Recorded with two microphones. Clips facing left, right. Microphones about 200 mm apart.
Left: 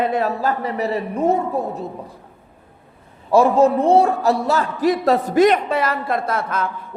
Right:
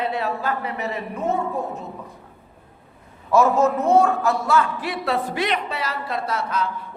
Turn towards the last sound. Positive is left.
turn(degrees=50)  # may be behind; listen again after turning